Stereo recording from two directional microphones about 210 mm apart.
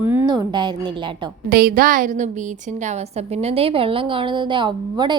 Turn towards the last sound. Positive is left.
turn(degrees=-20)  # may be behind; listen again after turning